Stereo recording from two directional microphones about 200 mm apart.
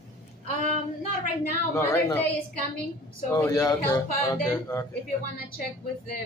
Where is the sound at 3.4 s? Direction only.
20° left (ahead or behind).